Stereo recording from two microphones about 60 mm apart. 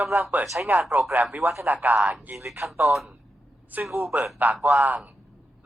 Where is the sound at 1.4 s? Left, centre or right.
Right.